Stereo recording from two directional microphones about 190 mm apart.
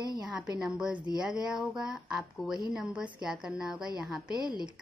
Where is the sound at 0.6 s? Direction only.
5° right (ahead or behind).